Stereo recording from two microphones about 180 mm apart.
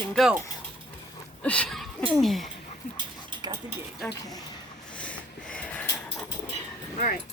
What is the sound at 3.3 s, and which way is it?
Stir, 25° right (ahead or behind).